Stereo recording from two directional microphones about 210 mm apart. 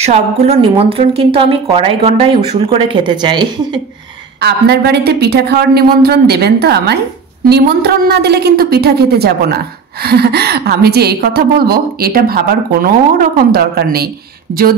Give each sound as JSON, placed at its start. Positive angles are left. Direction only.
{"t": 0.0, "sound": "speech", "side_deg": -30}
{"t": 4.4, "sound": "a woman's voice", "side_deg": -50}